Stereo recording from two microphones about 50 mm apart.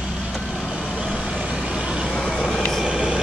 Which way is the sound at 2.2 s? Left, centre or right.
Centre.